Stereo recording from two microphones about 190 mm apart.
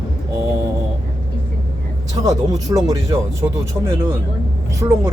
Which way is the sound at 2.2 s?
20° right (ahead or behind).